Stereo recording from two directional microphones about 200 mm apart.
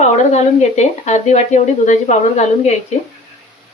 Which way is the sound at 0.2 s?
35° left (ahead or behind).